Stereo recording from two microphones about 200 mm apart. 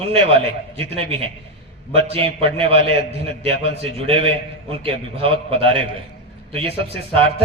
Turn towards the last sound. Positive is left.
turn(degrees=-30)  # may be behind; listen again after turning